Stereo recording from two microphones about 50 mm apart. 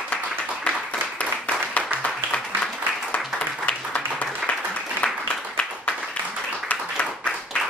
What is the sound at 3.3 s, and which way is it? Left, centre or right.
Applause, left.